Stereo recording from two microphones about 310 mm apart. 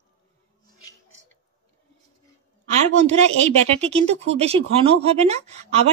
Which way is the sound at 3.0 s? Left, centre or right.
Right.